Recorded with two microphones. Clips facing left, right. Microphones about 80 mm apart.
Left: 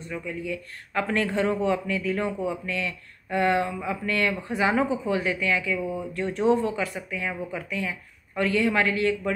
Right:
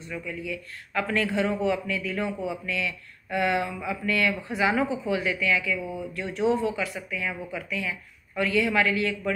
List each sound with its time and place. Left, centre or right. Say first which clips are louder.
0.1 s speech: left 2 dB; left